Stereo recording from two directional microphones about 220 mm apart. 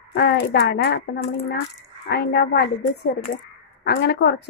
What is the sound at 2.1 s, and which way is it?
A woman's voice, 50° left (ahead or behind).